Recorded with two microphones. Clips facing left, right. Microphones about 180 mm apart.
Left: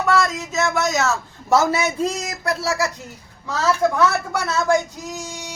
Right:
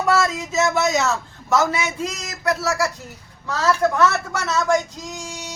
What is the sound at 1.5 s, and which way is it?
A man's voice, 30° left (ahead or behind).